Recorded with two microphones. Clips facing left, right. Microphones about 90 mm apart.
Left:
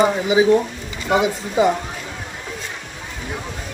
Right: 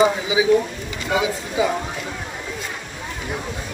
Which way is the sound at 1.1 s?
55° left (ahead or behind).